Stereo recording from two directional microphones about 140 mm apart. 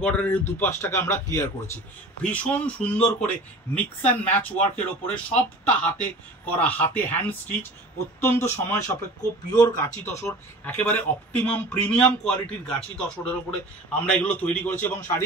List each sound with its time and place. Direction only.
0.0 s speech: 10° left (ahead or behind); by 9.8 s 30° left (ahead or behind)
10.0 s speech: 15° left (ahead or behind)